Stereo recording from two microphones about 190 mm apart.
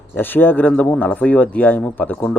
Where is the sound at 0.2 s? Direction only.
10° left (ahead or behind).